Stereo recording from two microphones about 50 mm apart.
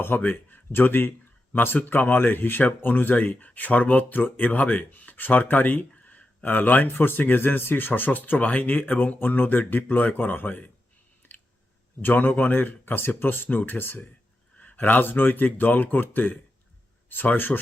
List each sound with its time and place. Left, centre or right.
0.0 s speech: left
12.0 s speech: left
14.6 s speech: left